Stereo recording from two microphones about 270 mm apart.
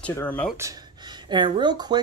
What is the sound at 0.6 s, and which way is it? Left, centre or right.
Speech, centre.